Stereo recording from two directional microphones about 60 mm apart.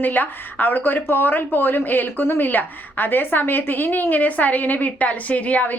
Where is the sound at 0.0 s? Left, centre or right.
Left.